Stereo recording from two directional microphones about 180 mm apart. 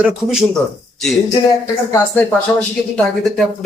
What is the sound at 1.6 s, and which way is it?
Speech, 15° left (ahead or behind).